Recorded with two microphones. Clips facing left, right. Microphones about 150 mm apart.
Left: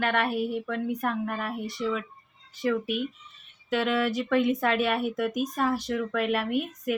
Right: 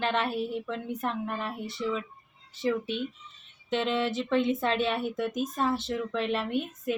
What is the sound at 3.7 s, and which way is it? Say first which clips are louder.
Speech: left 2 dB; 25° right (ahead or behind).